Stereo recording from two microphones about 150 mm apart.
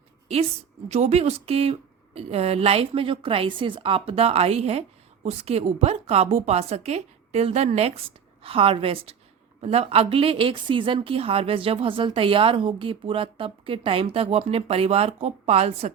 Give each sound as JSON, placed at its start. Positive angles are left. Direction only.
{"t": 0.9, "sound": "a woman's voice", "side_deg": -45}